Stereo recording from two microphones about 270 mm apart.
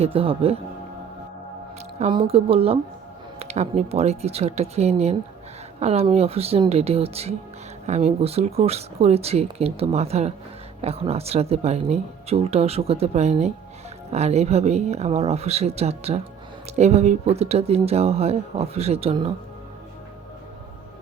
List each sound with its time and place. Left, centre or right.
0.0 s speech: right
2.0 s speech: centre